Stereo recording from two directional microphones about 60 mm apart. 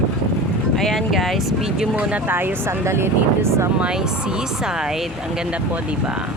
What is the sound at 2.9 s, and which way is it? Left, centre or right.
Speech, right.